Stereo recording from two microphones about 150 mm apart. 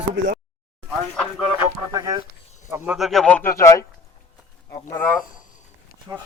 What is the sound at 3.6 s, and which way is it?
Speech, 20° left (ahead or behind).